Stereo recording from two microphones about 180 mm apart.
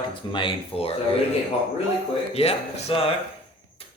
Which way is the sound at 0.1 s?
25° left (ahead or behind).